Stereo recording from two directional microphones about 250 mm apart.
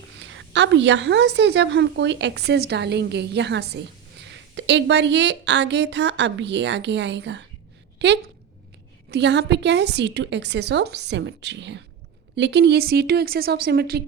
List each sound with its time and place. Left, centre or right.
0.2 s a woman's voice: right